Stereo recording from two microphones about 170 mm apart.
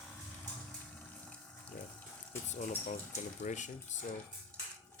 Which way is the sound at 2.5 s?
45° left (ahead or behind).